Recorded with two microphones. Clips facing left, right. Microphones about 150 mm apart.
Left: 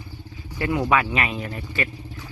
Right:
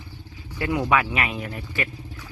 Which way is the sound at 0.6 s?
5° right (ahead or behind).